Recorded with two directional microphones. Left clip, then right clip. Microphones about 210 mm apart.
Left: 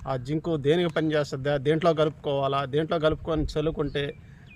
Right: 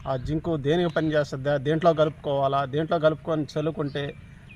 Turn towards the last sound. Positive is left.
turn(degrees=25)  # may be behind; listen again after turning